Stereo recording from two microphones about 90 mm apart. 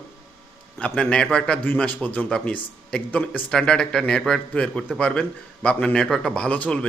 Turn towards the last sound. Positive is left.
turn(degrees=15)  # may be behind; listen again after turning